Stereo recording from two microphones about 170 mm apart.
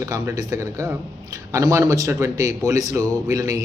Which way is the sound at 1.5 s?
20° right (ahead or behind).